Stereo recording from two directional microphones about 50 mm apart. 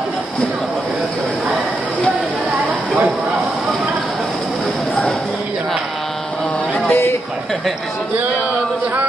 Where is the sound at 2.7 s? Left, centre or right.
Right.